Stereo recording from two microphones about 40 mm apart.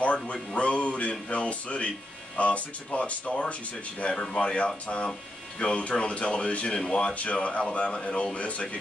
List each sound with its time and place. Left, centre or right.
0.0 s music: left
0.6 s speech: left
4.1 s speech: left
7.2 s speech: left